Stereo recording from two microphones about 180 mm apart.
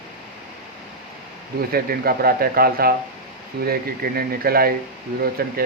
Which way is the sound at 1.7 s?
55° right (ahead or behind).